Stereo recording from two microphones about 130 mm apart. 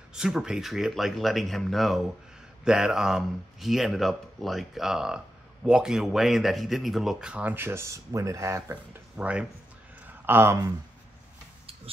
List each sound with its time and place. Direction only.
0.1 s speech: 5° right (ahead or behind); by 8.7 s 20° right (ahead or behind)
9.1 s speech: 10° right (ahead or behind)